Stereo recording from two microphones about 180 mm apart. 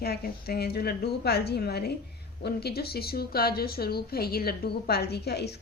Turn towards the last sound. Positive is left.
turn(degrees=65)  # may be behind; listen again after turning